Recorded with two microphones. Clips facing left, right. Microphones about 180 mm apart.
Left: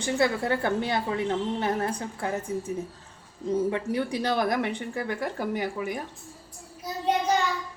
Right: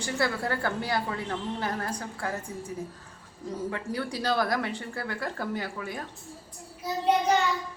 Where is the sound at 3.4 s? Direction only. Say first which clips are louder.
Left 7 dB; 20° left (ahead or behind).